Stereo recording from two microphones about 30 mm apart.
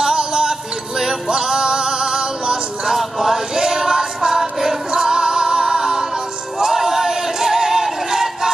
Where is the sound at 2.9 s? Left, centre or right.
Centre.